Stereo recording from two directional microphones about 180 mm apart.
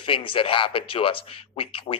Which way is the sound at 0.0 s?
30° left (ahead or behind).